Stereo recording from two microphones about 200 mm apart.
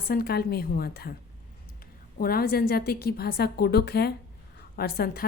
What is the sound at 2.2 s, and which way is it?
A woman's voice, 50° left (ahead or behind).